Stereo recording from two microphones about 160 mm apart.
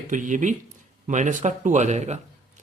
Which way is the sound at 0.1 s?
55° right (ahead or behind).